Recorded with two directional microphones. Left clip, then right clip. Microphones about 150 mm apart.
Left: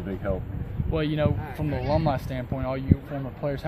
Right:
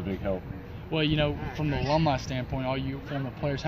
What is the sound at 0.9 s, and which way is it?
A man's voice, 30° left (ahead or behind).